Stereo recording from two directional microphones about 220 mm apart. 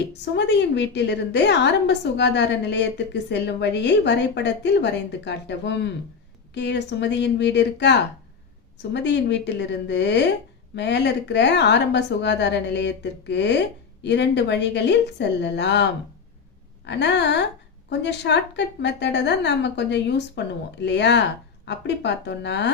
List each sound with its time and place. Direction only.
0.1 s a woman's voice: 50° left (ahead or behind)